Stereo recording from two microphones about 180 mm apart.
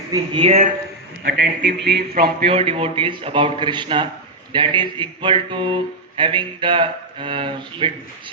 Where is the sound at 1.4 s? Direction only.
75° right (ahead or behind).